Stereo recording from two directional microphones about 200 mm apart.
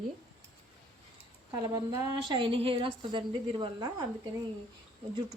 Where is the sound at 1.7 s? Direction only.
20° right (ahead or behind).